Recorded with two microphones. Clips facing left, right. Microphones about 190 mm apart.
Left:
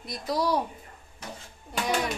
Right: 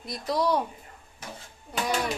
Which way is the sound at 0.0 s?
Centre (ahead or behind).